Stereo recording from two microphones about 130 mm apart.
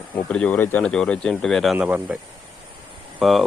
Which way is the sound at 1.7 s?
10° right (ahead or behind).